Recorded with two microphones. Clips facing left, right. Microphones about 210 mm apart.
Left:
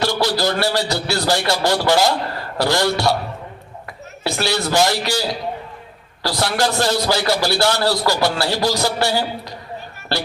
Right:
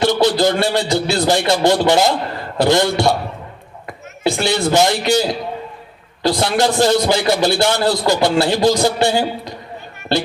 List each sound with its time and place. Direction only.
0.0 s a man's voice: 20° right (ahead or behind)
4.4 s a man's voice: 20° right (ahead or behind)
6.2 s a man's voice: 20° right (ahead or behind)